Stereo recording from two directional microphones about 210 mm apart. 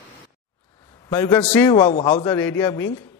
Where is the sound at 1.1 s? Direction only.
15° left (ahead or behind).